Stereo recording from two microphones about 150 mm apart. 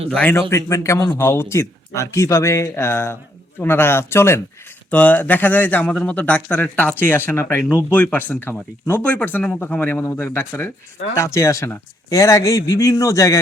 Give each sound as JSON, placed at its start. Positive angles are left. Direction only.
{"t": 0.1, "sound": "speech", "side_deg": 10}
{"t": 0.5, "sound": "speech", "side_deg": 20}